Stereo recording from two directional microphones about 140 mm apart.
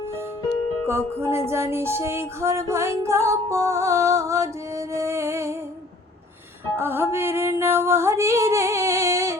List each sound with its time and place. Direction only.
0.9 s music: 15° right (ahead or behind)
6.7 s music: 15° right (ahead or behind)